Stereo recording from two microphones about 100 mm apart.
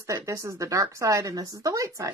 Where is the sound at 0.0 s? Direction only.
30° right (ahead or behind).